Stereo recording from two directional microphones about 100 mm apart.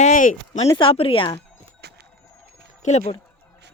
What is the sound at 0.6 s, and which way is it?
Speech, 60° left (ahead or behind).